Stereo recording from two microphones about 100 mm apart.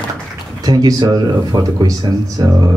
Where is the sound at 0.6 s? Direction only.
40° right (ahead or behind).